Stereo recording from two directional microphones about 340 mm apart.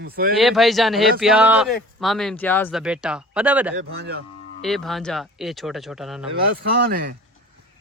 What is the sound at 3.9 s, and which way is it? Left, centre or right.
Speech, right.